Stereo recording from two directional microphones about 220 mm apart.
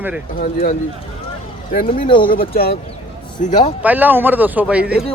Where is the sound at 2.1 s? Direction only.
20° left (ahead or behind).